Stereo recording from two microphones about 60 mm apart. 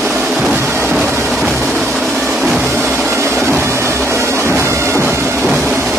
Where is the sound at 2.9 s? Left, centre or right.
Right.